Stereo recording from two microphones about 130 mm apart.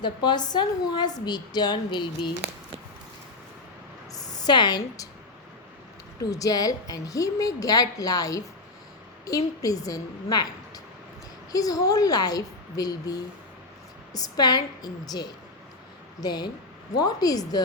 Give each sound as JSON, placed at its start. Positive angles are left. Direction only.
{"t": 0.0, "sound": "a woman's voice", "side_deg": 35}
{"t": 4.1, "sound": "a sound", "side_deg": 30}
{"t": 6.3, "sound": "a woman's voice", "side_deg": 30}
{"t": 11.5, "sound": "a woman's voice", "side_deg": 30}